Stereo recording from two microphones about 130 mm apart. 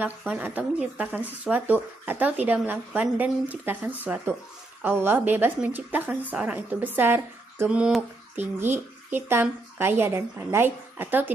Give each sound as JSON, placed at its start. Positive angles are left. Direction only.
{"t": 0.0, "sound": "speech", "side_deg": -10}